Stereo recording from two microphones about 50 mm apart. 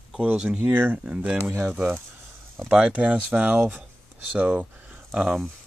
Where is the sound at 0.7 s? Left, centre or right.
Right.